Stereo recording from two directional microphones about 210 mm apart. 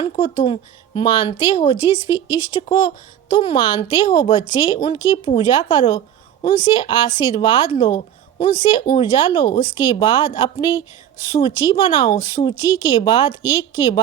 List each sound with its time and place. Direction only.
0.0 s speech: 25° left (ahead or behind)
2.0 s speech: 10° right (ahead or behind)
2.3 s speech: 25° left (ahead or behind)